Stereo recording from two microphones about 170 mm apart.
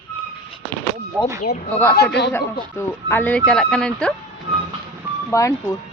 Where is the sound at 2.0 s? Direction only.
90° left.